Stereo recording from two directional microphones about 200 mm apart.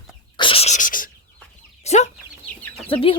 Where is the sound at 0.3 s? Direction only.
25° left (ahead or behind).